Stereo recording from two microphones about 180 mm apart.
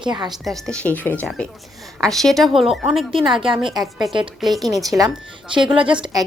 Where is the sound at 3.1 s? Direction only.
30° right (ahead or behind).